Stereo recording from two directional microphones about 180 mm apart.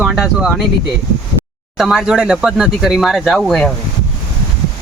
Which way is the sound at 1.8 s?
Centre (ahead or behind).